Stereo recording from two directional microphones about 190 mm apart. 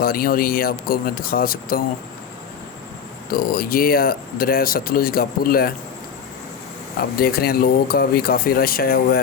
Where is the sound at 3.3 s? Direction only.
50° left (ahead or behind).